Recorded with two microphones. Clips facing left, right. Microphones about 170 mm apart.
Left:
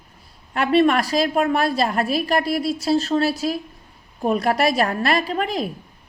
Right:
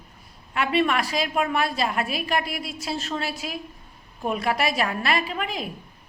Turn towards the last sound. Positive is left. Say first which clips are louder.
# left 6 dB
turn(degrees=40)  # may be behind; listen again after turning